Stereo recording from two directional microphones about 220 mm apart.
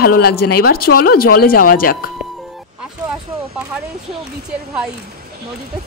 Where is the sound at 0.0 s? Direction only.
45° left (ahead or behind).